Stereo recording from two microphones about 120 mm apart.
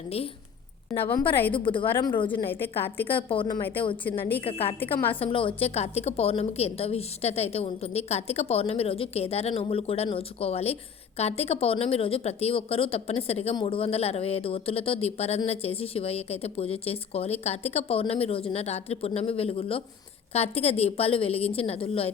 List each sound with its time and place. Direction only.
1.0 s a woman's voice: 15° left (ahead or behind)
1.5 s a woman's voice: 45° left (ahead or behind)
2.3 s a woman's voice: 20° left (ahead or behind)
4.4 s a woman's voice: 50° left (ahead or behind)